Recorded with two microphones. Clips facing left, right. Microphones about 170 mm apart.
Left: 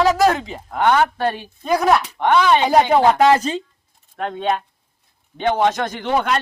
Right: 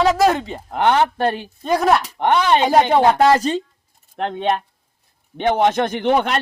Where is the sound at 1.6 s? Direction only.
Centre (ahead or behind).